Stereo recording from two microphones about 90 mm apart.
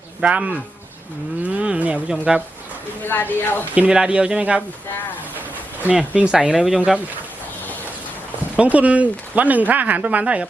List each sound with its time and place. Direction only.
0.2 s speech: 15° right (ahead or behind)
1.5 s speech: 15° right (ahead or behind)
3.0 s speech: 20° left (ahead or behind)
3.8 s speech: 10° right (ahead or behind)
5.9 s speech: 10° right (ahead or behind)
8.5 s speech: 15° right (ahead or behind)